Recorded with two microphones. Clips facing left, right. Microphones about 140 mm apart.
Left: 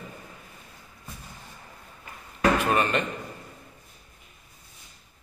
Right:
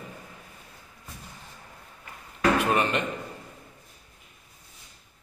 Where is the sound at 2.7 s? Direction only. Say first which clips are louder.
Left 1 dB; 20° right (ahead or behind).